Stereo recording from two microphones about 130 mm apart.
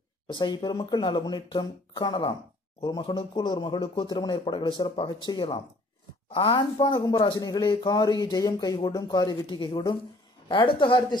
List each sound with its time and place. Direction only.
0.3 s speech: 35° left (ahead or behind)